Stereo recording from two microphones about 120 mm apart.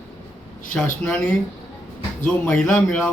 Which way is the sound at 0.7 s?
5° left (ahead or behind).